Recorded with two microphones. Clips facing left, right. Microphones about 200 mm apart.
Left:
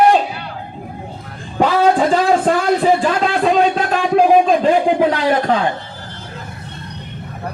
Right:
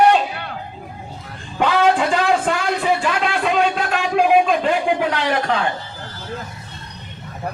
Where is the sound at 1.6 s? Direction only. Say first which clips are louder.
Left 3 dB; 40° left (ahead or behind).